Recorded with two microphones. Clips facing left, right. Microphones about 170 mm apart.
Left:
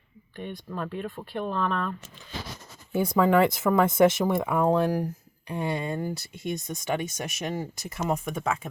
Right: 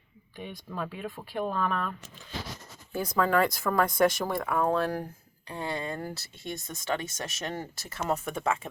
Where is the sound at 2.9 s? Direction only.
20° left (ahead or behind).